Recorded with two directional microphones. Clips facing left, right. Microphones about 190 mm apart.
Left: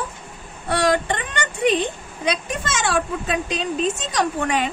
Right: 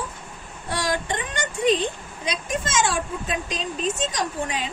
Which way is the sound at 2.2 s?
65° left (ahead or behind).